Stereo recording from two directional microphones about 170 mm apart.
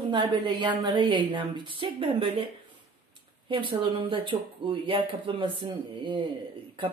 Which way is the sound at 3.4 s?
30° right (ahead or behind).